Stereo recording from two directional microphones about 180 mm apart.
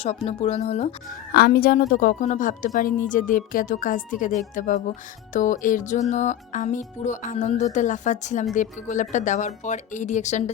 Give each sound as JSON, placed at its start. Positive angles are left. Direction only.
{"t": 0.0, "sound": "speech", "side_deg": 35}
{"t": 1.3, "sound": "a woman's voice", "side_deg": 60}